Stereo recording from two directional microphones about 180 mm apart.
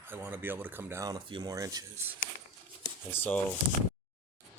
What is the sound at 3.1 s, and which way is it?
Speech, 10° left (ahead or behind).